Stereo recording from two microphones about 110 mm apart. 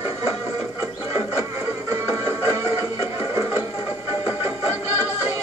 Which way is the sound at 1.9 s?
30° right (ahead or behind).